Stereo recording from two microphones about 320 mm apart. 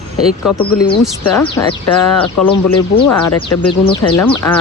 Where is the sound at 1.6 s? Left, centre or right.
Left.